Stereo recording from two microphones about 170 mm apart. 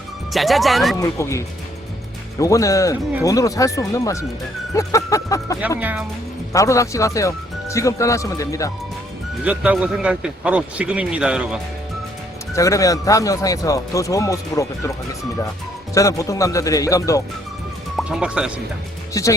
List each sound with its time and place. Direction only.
0.3 s speech: centre (ahead or behind)
0.9 s speech: 15° left (ahead or behind)
5.8 s speech: 10° right (ahead or behind)
6.5 s speech: 20° left (ahead or behind)
9.4 s speech: 5° right (ahead or behind)
12.5 s speech: 20° left (ahead or behind)
17.9 s speech: 5° right (ahead or behind)
19.1 s speech: 20° left (ahead or behind)